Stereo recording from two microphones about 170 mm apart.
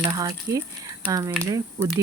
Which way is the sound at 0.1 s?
20° right (ahead or behind).